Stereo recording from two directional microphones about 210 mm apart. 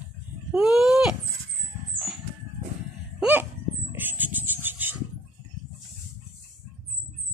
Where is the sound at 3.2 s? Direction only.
10° right (ahead or behind).